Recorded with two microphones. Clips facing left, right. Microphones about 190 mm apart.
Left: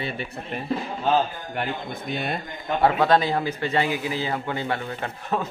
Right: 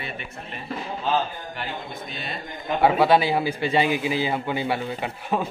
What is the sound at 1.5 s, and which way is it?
Speech, 55° left (ahead or behind).